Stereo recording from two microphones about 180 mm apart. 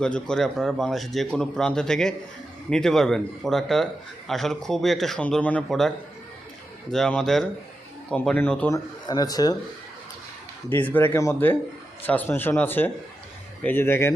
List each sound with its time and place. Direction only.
0.0 s speech: 5° left (ahead or behind)
6.9 s speech: centre (ahead or behind)
8.7 s speech: 20° left (ahead or behind)
10.7 s speech: 10° left (ahead or behind)